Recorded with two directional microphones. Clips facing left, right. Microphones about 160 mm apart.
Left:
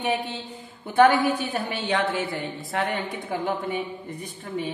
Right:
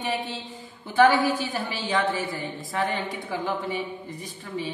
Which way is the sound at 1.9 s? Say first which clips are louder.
Even; 70° left (ahead or behind).